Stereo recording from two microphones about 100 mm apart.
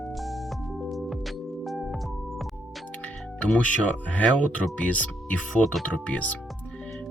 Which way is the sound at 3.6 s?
15° left (ahead or behind).